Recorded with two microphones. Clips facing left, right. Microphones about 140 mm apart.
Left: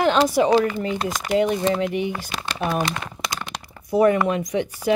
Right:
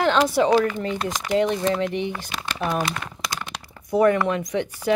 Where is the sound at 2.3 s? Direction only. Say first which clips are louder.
Left 1 dB; 35° left (ahead or behind).